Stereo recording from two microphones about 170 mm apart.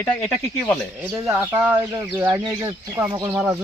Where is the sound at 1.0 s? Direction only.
10° right (ahead or behind).